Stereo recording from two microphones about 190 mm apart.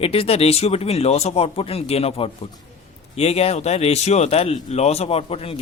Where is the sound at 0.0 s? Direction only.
30° left (ahead or behind).